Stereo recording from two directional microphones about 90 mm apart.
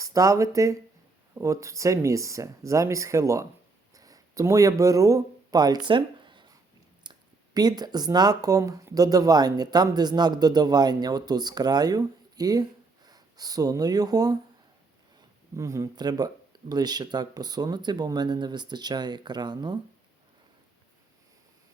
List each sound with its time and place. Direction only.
0.0 s speech: 40° right (ahead or behind)
5.9 s a sound: 65° right (ahead or behind)
7.0 s speech: 50° right (ahead or behind)
15.5 s speech: 35° right (ahead or behind)
16.0 s speech: 50° right (ahead or behind)